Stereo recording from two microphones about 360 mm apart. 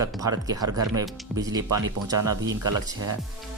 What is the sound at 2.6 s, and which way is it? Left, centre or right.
Speech, right.